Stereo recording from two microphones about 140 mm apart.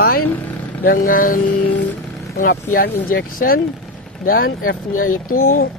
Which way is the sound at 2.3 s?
80° left.